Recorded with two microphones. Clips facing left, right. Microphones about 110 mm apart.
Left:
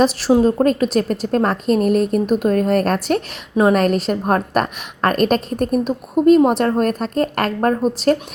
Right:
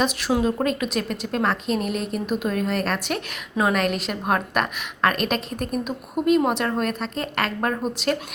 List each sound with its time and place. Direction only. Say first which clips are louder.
0.0 s a woman's voice: left 8 dB; 35° left (ahead or behind)